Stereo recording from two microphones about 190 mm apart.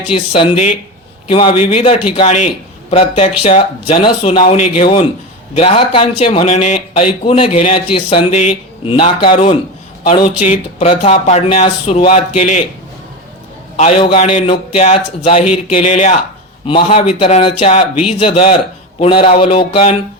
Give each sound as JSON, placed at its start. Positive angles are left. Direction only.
{"t": 0.3, "sound": "speech", "side_deg": 30}
{"t": 13.7, "sound": "speech", "side_deg": 30}
{"t": 16.6, "sound": "speech", "side_deg": 25}